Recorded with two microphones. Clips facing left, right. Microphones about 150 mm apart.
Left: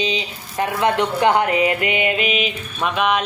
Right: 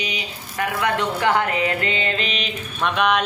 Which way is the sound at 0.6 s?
25° left (ahead or behind).